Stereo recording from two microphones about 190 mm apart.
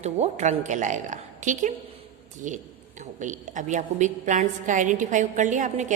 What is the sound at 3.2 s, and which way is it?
A woman's voice, 40° right (ahead or behind).